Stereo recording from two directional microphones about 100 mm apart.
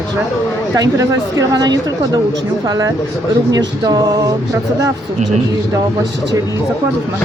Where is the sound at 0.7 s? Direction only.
35° right (ahead or behind).